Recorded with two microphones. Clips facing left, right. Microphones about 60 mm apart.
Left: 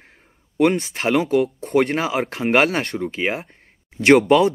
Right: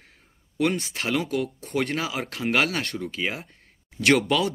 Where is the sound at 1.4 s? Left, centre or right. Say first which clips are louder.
Left 8 dB; left.